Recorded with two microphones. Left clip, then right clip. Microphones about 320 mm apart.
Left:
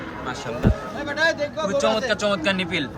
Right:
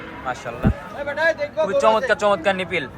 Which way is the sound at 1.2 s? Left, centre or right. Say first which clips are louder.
Right 2 dB; centre.